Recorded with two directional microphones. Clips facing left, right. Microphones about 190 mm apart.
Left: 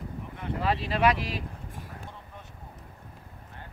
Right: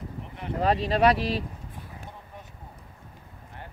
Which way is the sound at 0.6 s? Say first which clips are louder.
Right 4 dB; 40° right (ahead or behind).